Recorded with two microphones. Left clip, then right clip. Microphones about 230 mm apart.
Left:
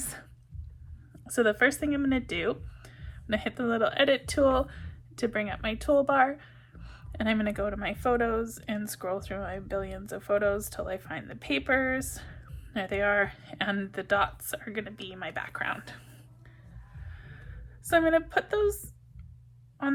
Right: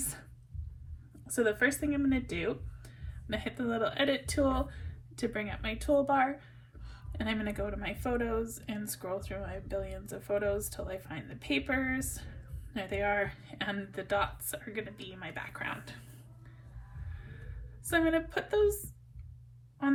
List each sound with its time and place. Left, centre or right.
1.3 s speech: left
17.8 s speech: left
19.8 s speech: left